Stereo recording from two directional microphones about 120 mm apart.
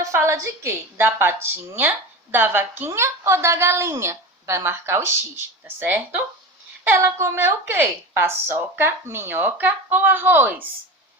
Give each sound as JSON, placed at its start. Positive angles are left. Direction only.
{"t": 0.0, "sound": "a woman's voice", "side_deg": -20}